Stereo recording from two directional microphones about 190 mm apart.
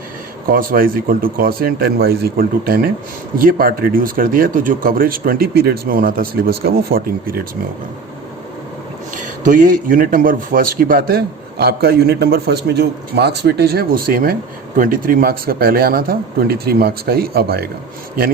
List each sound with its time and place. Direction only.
0.4 s a man's voice: 50° right (ahead or behind)
9.1 s a man's voice: 45° right (ahead or behind)